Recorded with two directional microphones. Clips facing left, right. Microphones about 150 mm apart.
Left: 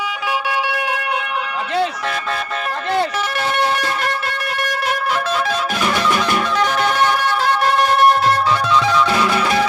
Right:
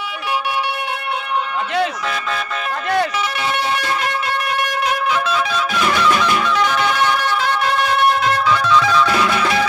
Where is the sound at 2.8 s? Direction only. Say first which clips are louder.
Right 1 dB; 30° left (ahead or behind).